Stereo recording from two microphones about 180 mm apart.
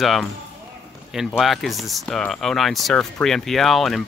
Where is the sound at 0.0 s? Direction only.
Centre (ahead or behind).